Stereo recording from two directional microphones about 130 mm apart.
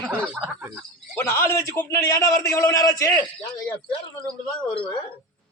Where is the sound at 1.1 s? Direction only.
20° left (ahead or behind).